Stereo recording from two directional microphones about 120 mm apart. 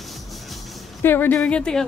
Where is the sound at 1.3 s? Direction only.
10° left (ahead or behind).